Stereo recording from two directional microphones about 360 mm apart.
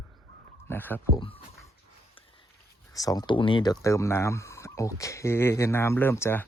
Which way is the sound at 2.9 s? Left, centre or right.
Centre.